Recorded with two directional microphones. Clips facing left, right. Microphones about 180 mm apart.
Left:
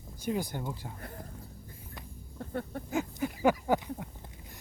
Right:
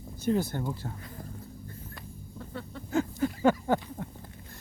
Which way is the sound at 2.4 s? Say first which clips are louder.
Left 5 dB; 50° left (ahead or behind).